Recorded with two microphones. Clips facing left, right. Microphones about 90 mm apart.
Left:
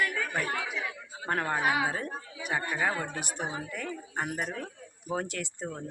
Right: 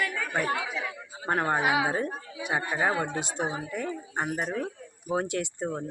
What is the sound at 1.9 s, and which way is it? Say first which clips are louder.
A woman's voice: right 5 dB; 20° right (ahead or behind).